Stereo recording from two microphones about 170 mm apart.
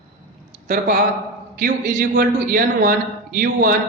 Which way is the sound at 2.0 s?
65° right (ahead or behind).